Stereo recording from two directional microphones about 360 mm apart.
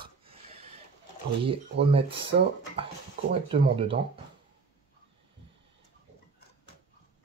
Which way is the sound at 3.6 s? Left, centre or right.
Centre.